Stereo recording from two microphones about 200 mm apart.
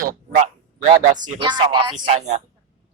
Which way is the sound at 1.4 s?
25° right (ahead or behind).